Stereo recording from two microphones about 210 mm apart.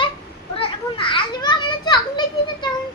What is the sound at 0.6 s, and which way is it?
Children playing, 25° left (ahead or behind).